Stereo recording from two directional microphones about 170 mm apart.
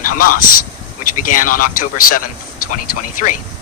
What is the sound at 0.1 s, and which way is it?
Speech, 55° left (ahead or behind).